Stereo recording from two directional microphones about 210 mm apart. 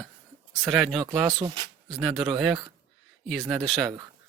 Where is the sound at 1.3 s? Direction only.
20° right (ahead or behind).